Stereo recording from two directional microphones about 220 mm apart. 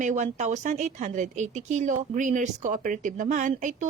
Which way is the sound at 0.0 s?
35° right (ahead or behind).